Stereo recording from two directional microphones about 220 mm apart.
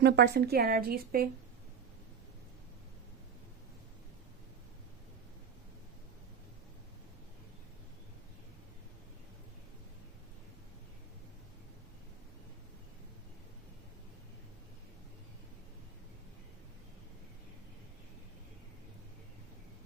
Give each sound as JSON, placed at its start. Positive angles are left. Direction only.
{"t": 0.0, "sound": "a woman's voice", "side_deg": -50}